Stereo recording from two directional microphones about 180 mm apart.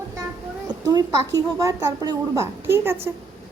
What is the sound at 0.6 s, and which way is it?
A woman's voice, 20° right (ahead or behind).